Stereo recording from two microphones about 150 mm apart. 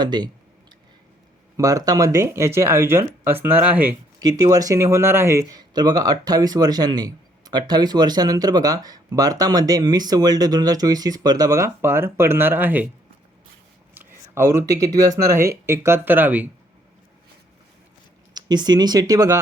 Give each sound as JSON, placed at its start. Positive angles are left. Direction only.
{"t": 0.0, "sound": "speech", "side_deg": -30}
{"t": 1.5, "sound": "speech", "side_deg": -20}
{"t": 4.2, "sound": "speech", "side_deg": -25}
{"t": 13.9, "sound": "a sound", "side_deg": -15}
{"t": 14.9, "sound": "speech", "side_deg": -25}
{"t": 18.3, "sound": "speech", "side_deg": -30}